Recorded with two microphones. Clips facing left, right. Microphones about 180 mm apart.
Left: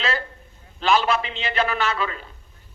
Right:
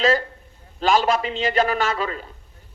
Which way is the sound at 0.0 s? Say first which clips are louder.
Right 7 dB; 45° right (ahead or behind).